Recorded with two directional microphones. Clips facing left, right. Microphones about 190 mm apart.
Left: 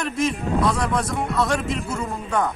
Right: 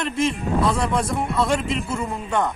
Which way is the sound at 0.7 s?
25° right (ahead or behind).